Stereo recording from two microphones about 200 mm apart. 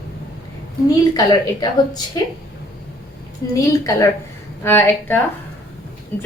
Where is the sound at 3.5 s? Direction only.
15° left (ahead or behind).